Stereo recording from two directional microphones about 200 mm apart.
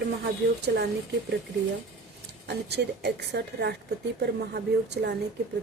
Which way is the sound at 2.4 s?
55° right (ahead or behind).